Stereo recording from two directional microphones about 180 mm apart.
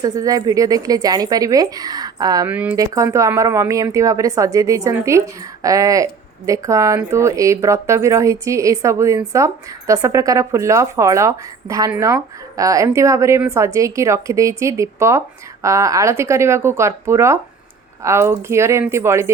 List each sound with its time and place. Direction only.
0.0 s speech: 20° right (ahead or behind)
2.5 s speech: 10° right (ahead or behind)
2.7 s speech: 20° right (ahead or behind)